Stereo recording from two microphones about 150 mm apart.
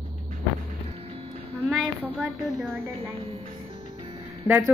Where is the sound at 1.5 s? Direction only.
Centre (ahead or behind).